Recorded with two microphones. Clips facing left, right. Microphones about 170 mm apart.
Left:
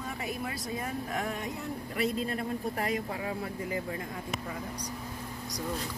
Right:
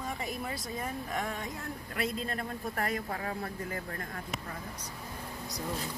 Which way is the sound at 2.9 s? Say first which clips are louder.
Left 2 dB; 15° left (ahead or behind).